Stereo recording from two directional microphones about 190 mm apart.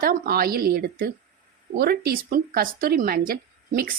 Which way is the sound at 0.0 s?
50° right (ahead or behind).